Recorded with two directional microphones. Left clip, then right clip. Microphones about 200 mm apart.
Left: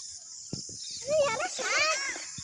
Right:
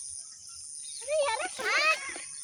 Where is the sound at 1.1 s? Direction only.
55° left (ahead or behind).